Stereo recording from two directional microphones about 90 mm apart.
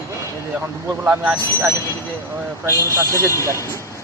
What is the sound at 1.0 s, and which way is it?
Speech, 15° right (ahead or behind).